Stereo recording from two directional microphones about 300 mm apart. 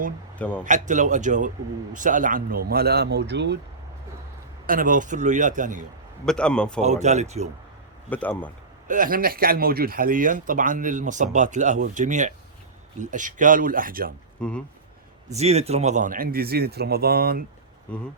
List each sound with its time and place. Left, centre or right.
0.3 s a man's voice: centre
0.6 s speech: right
4.6 s speech: right
6.2 s speech: centre
6.8 s speech: right
8.1 s speech: centre
8.9 s speech: right
14.4 s speech: centre
15.3 s speech: right